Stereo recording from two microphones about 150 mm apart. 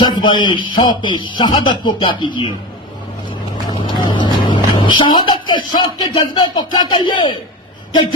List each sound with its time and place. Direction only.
0.0 s a man's voice: 30° left (ahead or behind)
3.8 s speech: 30° left (ahead or behind)